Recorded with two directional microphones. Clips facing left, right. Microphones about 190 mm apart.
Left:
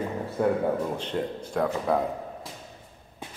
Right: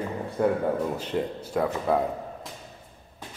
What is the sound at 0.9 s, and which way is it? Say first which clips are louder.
Speech: right 1 dB; 5° right (ahead or behind).